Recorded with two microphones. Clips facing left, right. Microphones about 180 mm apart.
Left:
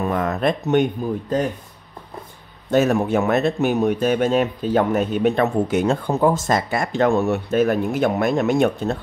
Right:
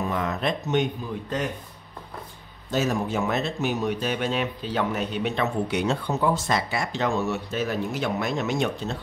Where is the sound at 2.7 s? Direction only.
60° left (ahead or behind).